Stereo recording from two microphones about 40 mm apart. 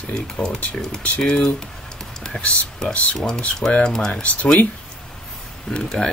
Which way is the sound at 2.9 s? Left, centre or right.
Left.